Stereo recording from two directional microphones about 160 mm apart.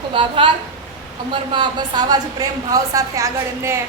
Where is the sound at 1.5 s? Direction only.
30° right (ahead or behind).